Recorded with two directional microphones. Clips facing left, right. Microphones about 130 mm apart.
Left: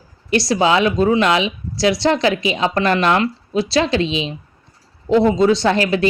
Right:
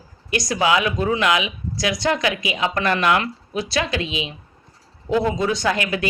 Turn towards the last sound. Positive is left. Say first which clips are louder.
# left 6 dB
turn(degrees=30)  # may be behind; listen again after turning